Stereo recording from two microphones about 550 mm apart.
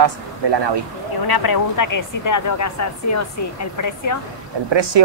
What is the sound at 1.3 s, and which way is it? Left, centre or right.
Speech, left.